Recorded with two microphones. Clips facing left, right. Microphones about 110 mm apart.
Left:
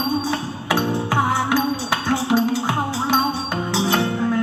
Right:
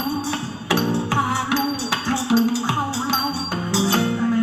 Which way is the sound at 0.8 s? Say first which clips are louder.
Left 1 dB; 20° left (ahead or behind).